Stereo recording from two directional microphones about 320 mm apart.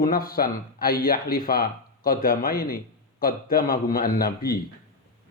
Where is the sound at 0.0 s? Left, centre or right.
Left.